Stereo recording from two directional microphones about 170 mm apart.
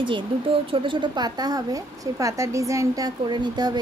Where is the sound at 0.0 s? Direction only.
30° right (ahead or behind).